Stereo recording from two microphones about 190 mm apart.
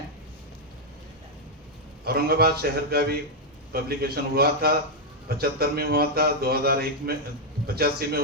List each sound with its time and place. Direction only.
2.0 s a man's voice: 55° right (ahead or behind)